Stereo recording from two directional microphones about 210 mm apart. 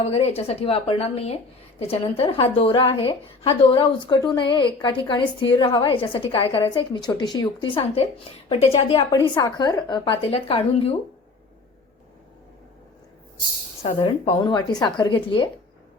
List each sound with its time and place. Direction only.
0.0 s a woman's voice: 30° left (ahead or behind)
13.8 s a woman's voice: 20° left (ahead or behind)